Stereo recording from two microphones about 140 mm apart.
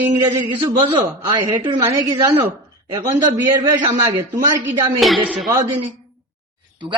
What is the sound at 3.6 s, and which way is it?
Speech, 25° right (ahead or behind).